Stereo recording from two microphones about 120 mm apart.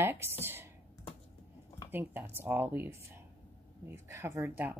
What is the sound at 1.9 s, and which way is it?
Speech, 15° right (ahead or behind).